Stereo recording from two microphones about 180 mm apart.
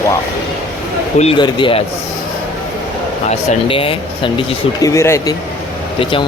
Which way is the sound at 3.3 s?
35° left (ahead or behind).